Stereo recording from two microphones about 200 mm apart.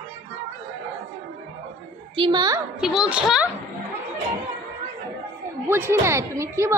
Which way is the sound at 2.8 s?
5° right (ahead or behind).